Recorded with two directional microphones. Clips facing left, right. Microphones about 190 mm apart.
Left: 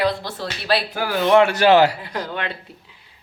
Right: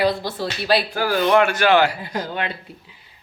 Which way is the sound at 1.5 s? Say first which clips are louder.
Left 3 dB; 40° left (ahead or behind).